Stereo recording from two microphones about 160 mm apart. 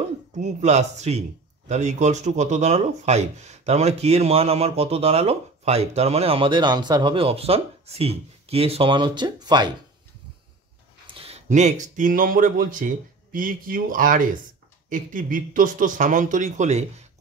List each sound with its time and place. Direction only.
0.3 s speech: 45° right (ahead or behind); by 9.7 s 25° right (ahead or behind)
11.1 s speech: 40° right (ahead or behind)